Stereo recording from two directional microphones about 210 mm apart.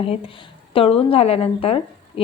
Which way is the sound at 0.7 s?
25° left (ahead or behind).